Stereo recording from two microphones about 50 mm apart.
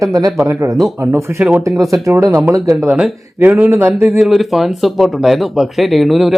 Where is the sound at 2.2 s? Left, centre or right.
Right.